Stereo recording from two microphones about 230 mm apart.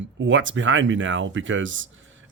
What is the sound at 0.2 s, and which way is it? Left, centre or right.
Speech, right.